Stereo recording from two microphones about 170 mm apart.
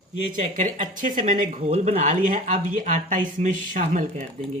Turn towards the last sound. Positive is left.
turn(degrees=-50)  # may be behind; listen again after turning